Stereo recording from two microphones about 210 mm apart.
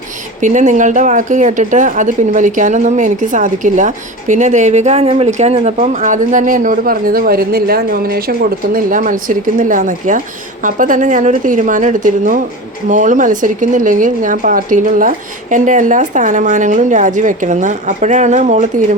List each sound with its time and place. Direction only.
0.4 s speech: 35° right (ahead or behind)